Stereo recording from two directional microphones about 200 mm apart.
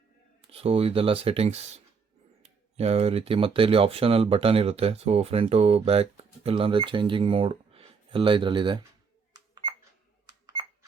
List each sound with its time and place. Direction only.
0.5 s speech: 30° right (ahead or behind)
9.3 s cash register: 20° right (ahead or behind)